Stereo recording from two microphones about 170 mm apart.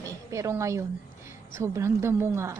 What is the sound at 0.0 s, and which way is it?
A woman's voice, 20° right (ahead or behind).